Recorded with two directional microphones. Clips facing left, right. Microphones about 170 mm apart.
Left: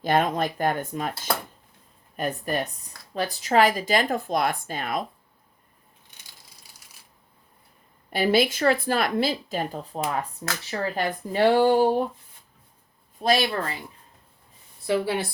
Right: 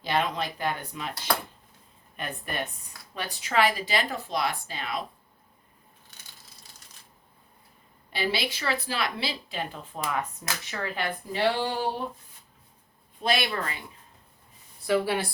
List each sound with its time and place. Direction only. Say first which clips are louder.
0.0 s speech: left 5 dB; 50° left (ahead or behind)
2.1 s speech: left 7 dB; 40° left (ahead or behind)
6.6 s shuffling cards: right 1 dB; 10° left (ahead or behind)
8.1 s speech: left 8 dB; 50° left (ahead or behind)
13.1 s speech: left 5 dB; 40° left (ahead or behind)
14.8 s speech: left 1 dB; 25° left (ahead or behind)